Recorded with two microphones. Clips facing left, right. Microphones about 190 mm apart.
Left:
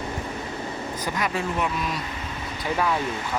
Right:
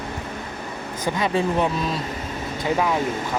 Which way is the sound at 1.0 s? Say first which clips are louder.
Right 6 dB; 30° right (ahead or behind).